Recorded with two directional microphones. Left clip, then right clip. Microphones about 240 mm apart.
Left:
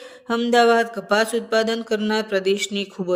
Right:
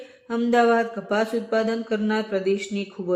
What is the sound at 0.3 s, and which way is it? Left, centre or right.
Speech, left.